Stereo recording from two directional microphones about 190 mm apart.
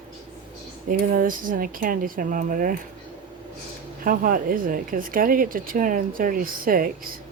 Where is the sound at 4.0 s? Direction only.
50° right (ahead or behind).